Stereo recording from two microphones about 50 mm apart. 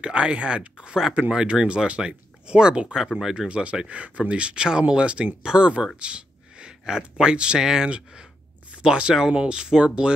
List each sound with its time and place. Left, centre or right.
0.0 s speech: right
3.4 s speech: right